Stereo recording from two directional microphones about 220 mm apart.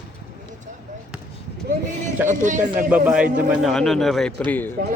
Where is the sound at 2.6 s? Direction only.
5° right (ahead or behind).